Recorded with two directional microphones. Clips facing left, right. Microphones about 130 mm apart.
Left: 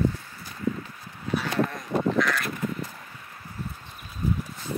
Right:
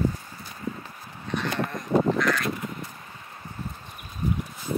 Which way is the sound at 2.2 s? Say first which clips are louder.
Even; centre (ahead or behind).